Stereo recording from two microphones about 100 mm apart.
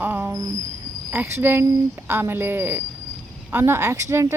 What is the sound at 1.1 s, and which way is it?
Speech, 25° right (ahead or behind).